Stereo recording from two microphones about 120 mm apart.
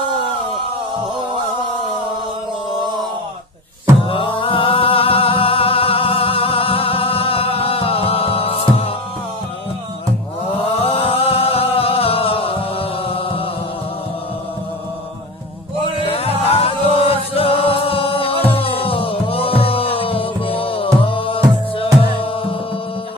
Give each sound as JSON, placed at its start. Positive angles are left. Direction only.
{"t": 4.1, "sound": "music", "side_deg": 45}
{"t": 10.8, "sound": "singing", "side_deg": 55}
{"t": 16.0, "sound": "music", "side_deg": 55}